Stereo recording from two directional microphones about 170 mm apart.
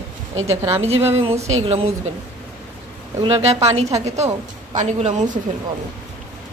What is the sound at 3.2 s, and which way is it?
A woman's voice, 40° right (ahead or behind).